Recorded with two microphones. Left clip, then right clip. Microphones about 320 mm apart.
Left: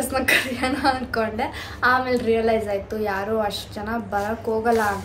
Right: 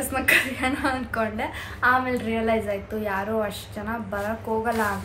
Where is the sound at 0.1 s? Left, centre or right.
Centre.